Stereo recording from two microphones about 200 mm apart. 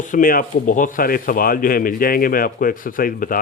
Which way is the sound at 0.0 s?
40° left (ahead or behind).